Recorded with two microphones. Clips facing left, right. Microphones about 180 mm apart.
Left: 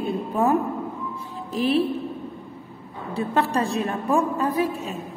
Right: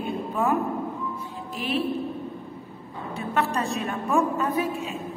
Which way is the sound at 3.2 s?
35° left (ahead or behind).